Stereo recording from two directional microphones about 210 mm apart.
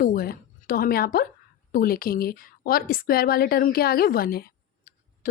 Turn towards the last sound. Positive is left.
turn(degrees=40)  # may be behind; listen again after turning